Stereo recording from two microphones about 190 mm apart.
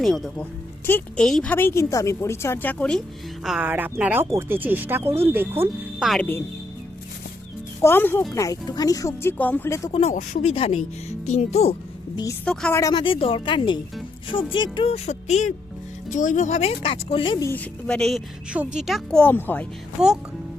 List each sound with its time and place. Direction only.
0.0 s a woman's voice: centre (ahead or behind)
3.4 s speech: 5° right (ahead or behind)
6.1 s a woman's voice: 5° left (ahead or behind)
7.8 s a woman's voice: 10° left (ahead or behind)
9.9 s speech: 35° left (ahead or behind)
12.5 s a woman's voice: 5° left (ahead or behind)
12.8 s speech: 25° left (ahead or behind)
17.5 s a woman's voice: 5° left (ahead or behind)